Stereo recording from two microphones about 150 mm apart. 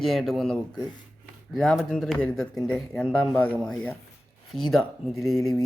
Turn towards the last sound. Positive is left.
turn(degrees=0)  # may be behind; listen again after turning